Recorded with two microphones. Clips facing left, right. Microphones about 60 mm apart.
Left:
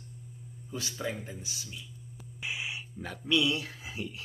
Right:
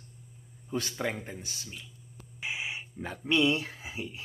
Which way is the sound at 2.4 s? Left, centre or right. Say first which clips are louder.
Right 1 dB; right.